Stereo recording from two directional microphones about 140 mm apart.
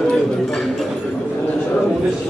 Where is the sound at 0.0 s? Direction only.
5° left (ahead or behind).